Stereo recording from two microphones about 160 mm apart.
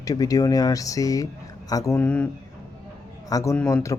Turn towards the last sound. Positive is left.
turn(degrees=20)  # may be behind; listen again after turning